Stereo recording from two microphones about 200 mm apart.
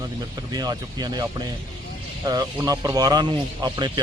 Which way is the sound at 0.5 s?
20° right (ahead or behind).